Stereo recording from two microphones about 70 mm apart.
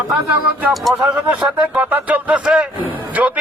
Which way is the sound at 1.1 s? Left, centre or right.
Centre.